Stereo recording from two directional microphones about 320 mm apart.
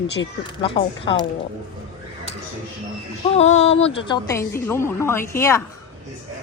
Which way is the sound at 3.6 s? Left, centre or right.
Centre.